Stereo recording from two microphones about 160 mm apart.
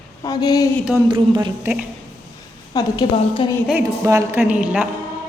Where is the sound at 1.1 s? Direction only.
30° right (ahead or behind).